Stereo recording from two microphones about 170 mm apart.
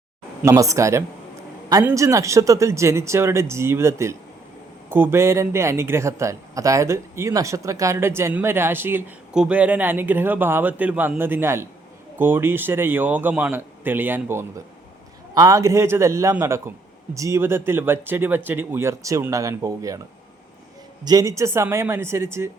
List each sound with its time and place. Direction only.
0.4 s a man's voice: 20° right (ahead or behind)
21.0 s a man's voice: 20° right (ahead or behind)